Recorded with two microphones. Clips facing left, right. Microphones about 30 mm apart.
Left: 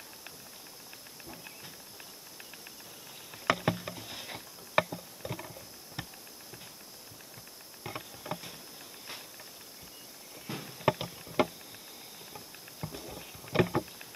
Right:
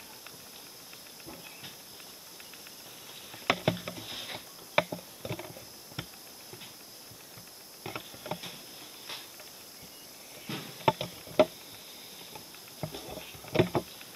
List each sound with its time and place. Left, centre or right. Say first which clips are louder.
3.1 s a sound: even; centre
4.9 s rowboat: right 1 dB; centre
7.8 s patter: right 1 dB; centre
9.1 s hiss: right 2 dB; right
10.4 s rowboat: right 2 dB; centre
12.8 s a sound: right 3 dB; centre
13.5 s rowboat: right 1 dB; centre